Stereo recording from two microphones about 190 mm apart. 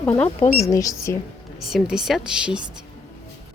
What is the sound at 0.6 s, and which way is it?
Speech, 15° left (ahead or behind).